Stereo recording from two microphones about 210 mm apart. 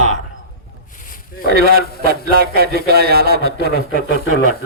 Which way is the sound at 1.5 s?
45° right (ahead or behind).